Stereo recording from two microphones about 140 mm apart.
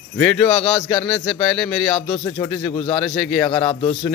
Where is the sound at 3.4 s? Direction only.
35° left (ahead or behind).